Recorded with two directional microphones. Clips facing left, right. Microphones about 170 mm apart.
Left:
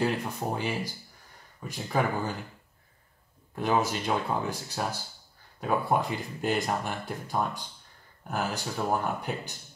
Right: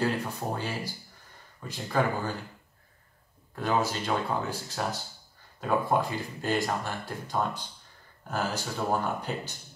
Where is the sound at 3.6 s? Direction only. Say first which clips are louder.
Left 1 dB; 15° left (ahead or behind).